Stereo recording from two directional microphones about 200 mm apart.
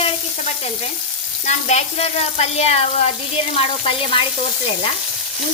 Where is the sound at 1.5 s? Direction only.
35° left (ahead or behind).